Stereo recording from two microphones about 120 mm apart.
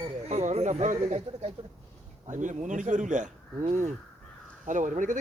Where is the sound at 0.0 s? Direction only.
60° right (ahead or behind).